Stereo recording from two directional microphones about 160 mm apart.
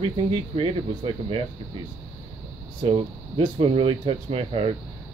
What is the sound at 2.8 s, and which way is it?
Speech, 35° right (ahead or behind).